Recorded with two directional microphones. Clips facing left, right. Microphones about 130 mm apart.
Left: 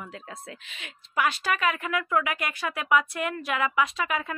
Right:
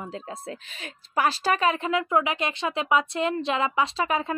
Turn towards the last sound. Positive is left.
turn(degrees=-30)  # may be behind; listen again after turning